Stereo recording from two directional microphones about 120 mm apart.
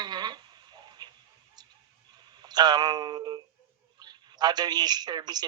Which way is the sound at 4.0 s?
35° right (ahead or behind).